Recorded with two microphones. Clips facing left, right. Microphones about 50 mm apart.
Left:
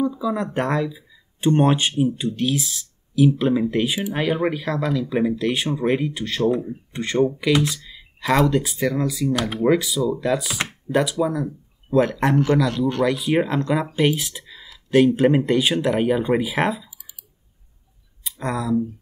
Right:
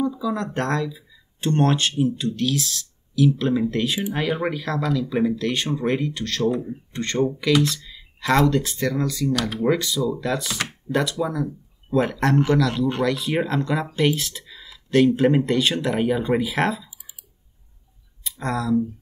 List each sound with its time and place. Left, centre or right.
0.0 s a man's voice: centre
18.2 s speech: centre